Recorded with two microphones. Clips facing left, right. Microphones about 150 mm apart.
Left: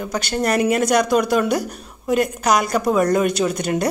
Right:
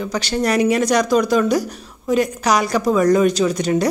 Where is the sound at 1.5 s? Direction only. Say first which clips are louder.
Right 2 dB; 55° left (ahead or behind).